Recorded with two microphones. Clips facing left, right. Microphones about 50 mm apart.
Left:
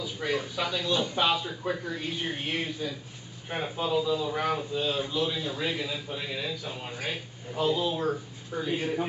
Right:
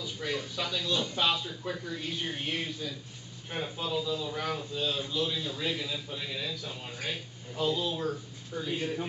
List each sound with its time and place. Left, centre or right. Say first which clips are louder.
0.0 s speech: left 4 dB; centre